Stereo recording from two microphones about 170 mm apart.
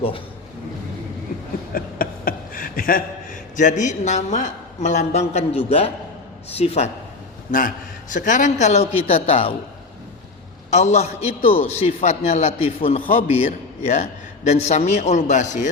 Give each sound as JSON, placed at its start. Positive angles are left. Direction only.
{"t": 1.7, "sound": "a sound", "side_deg": 55}
{"t": 3.6, "sound": "a woman's voice", "side_deg": 45}
{"t": 7.5, "sound": "a woman's voice", "side_deg": 50}
{"t": 10.7, "sound": "a man's voice", "side_deg": 40}